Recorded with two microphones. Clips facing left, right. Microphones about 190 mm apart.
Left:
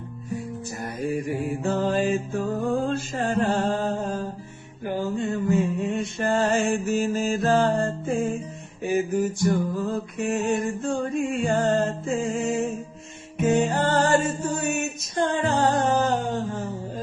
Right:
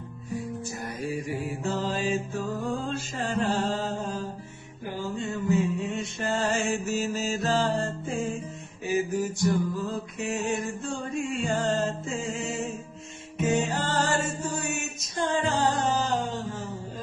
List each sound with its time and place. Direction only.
0.8 s mantra: 55° left (ahead or behind)
4.9 s a sound: 55° left (ahead or behind)
8.8 s mantra: 55° left (ahead or behind)
13.4 s music: 60° left (ahead or behind)